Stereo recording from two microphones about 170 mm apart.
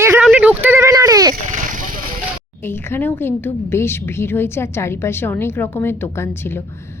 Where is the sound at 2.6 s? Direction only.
15° left (ahead or behind).